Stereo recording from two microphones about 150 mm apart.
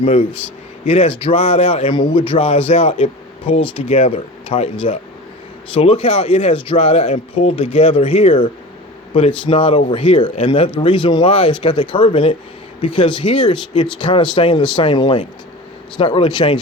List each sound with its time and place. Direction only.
0.0 s a man's voice: 40° left (ahead or behind)